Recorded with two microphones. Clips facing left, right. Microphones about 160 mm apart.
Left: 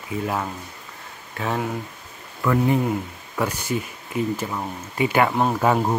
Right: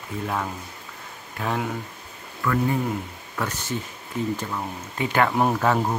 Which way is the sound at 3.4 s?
10° left (ahead or behind).